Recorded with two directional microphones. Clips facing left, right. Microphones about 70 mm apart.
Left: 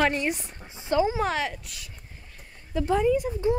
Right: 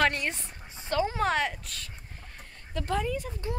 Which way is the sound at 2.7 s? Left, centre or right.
Centre.